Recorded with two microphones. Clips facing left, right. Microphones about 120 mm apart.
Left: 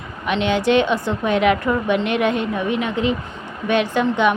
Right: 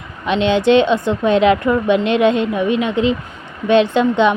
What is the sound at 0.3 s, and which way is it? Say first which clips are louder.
A woman's voice: right 4 dB; 20° right (ahead or behind).